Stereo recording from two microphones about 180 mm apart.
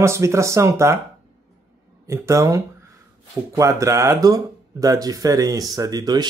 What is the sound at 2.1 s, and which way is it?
Speech, 15° right (ahead or behind).